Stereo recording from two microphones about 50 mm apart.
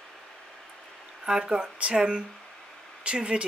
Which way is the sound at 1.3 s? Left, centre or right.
Centre.